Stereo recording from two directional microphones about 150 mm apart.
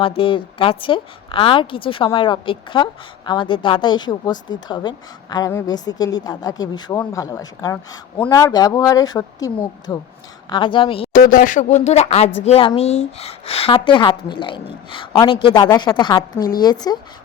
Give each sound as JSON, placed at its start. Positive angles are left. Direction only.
{"t": 0.0, "sound": "a woman's voice", "side_deg": 35}
{"t": 11.1, "sound": "speech", "side_deg": 65}